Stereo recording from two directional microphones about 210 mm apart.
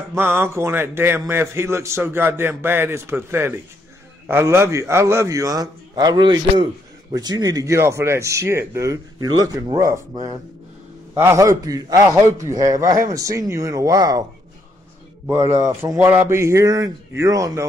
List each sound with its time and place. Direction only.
0.1 s a man's voice: 10° right (ahead or behind)
15.6 s a man's voice: 15° right (ahead or behind)